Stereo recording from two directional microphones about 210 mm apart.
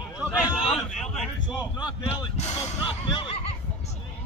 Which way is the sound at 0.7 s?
5° left (ahead or behind).